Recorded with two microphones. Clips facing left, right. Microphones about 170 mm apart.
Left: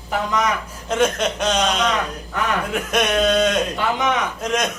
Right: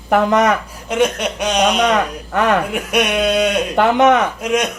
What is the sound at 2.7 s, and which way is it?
Speech, 10° right (ahead or behind).